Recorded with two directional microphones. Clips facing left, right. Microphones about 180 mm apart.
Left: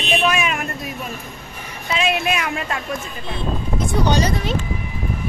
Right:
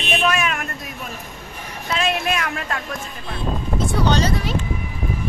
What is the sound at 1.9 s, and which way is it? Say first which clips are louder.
Speech: left 1 dB; 5° left (ahead or behind).